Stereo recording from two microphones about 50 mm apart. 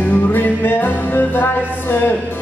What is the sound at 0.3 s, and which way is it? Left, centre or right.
Music, left.